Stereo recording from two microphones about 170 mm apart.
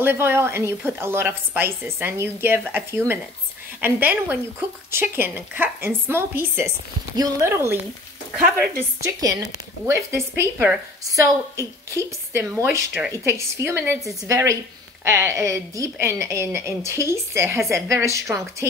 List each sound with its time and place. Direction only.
0.0 s speech: 15° right (ahead or behind)